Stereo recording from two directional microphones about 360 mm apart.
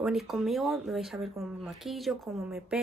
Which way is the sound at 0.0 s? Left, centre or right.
Centre.